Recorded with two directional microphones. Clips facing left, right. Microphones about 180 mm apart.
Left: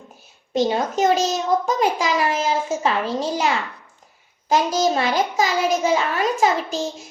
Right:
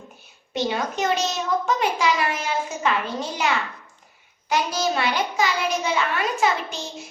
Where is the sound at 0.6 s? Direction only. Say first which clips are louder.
Left 5 dB; 35° left (ahead or behind).